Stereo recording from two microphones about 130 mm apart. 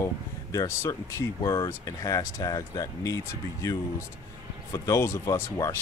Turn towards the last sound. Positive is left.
turn(degrees=25)  # may be behind; listen again after turning